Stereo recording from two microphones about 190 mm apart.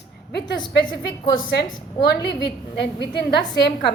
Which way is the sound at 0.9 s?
25° left (ahead or behind).